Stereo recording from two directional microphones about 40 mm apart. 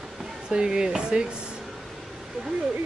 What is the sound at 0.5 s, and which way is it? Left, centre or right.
Speech, centre.